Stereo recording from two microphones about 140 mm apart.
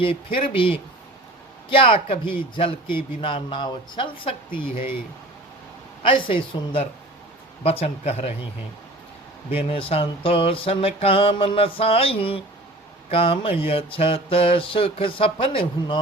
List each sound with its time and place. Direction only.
0.0 s music: 40° left (ahead or behind)
6.0 s music: 40° left (ahead or behind)
7.6 s speech: 45° left (ahead or behind)
9.5 s music: 40° left (ahead or behind)